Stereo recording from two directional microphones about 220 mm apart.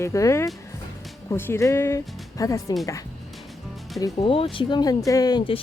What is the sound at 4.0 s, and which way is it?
Speech, 25° left (ahead or behind).